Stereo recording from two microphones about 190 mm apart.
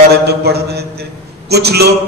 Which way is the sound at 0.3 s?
60° right (ahead or behind).